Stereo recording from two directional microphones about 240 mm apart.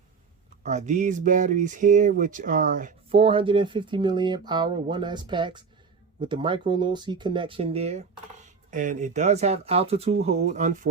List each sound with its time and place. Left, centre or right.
0.6 s speech: right